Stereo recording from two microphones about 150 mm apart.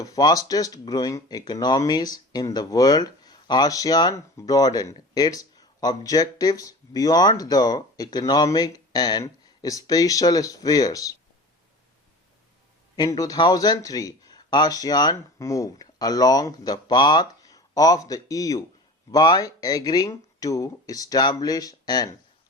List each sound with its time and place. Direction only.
0.0 s speech: 25° left (ahead or behind)
13.0 s speech: 25° left (ahead or behind)